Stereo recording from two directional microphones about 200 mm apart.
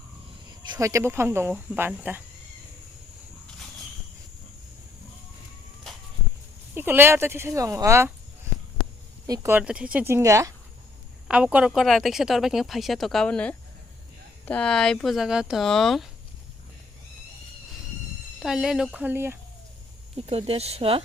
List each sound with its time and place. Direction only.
0.6 s speech: 20° right (ahead or behind)
6.7 s speech: 10° right (ahead or behind)
9.2 s speech: 15° right (ahead or behind); by 16.0 s centre (ahead or behind)
18.3 s speech: centre (ahead or behind)
20.1 s speech: 30° right (ahead or behind)